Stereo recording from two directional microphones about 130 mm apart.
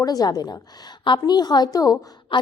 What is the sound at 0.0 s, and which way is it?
A woman's voice, 30° left (ahead or behind).